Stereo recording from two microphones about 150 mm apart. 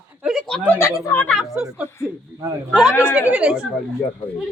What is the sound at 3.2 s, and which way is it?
Speech, 10° right (ahead or behind).